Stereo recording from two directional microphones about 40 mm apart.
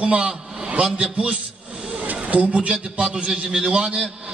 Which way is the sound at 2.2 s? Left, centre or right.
Right.